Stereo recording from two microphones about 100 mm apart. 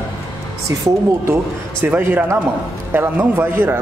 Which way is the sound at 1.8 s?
20° right (ahead or behind).